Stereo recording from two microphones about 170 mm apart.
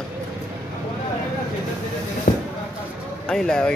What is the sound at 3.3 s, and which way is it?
Speech, 5° left (ahead or behind).